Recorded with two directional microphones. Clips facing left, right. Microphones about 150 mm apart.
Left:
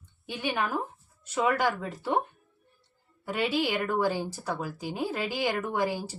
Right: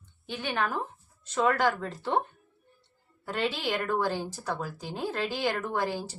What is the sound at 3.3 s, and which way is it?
Speech, 10° left (ahead or behind).